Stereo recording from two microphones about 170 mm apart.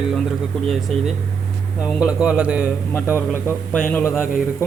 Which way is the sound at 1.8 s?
5° right (ahead or behind).